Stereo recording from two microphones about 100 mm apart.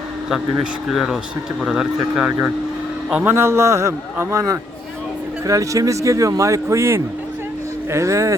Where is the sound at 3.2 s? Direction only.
25° right (ahead or behind).